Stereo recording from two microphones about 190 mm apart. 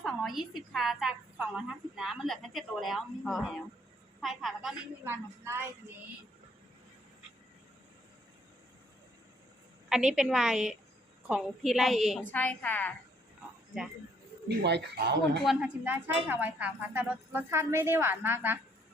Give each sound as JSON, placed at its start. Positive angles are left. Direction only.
{"t": 0.0, "sound": "a woman's voice", "side_deg": 0}
{"t": 5.0, "sound": "a woman's voice", "side_deg": -10}
{"t": 9.9, "sound": "a woman's voice", "side_deg": -5}
{"t": 14.4, "sound": "speech", "side_deg": -60}
{"t": 15.4, "sound": "a woman's voice", "side_deg": -5}